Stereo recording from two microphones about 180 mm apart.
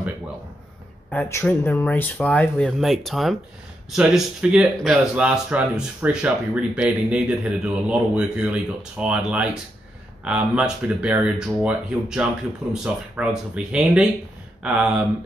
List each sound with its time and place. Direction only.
1.1 s speech: 10° left (ahead or behind); by 15.0 s 5° right (ahead or behind)